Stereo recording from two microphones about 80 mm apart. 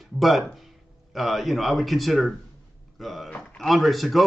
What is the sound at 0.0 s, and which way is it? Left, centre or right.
Speech, centre.